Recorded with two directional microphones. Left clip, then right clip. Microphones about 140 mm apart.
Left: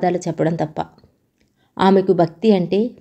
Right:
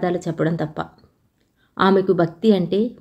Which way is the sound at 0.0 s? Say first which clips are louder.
Left 3 dB; 35° left (ahead or behind).